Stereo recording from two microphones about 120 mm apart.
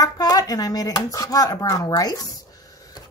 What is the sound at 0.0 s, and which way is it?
Speech, 30° left (ahead or behind).